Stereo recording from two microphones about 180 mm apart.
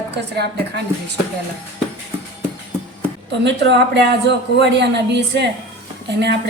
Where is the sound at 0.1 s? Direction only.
70° right (ahead or behind).